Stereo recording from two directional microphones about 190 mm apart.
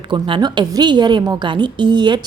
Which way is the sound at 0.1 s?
25° right (ahead or behind).